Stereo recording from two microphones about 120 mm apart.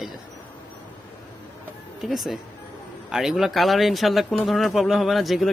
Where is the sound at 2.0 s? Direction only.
Centre (ahead or behind).